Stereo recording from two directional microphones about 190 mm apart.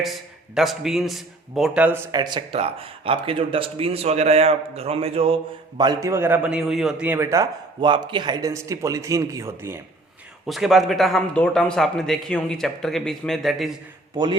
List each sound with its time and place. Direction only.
0.0 s a man's voice: centre (ahead or behind)
2.1 s speech: 25° right (ahead or behind)
10.4 s a man's voice: centre (ahead or behind)